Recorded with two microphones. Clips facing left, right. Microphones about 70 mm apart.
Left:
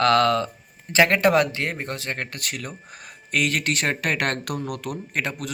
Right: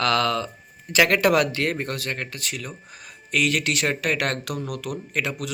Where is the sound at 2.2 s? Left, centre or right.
Left.